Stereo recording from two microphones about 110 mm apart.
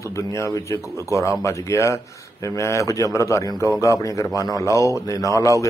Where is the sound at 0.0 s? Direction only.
25° left (ahead or behind).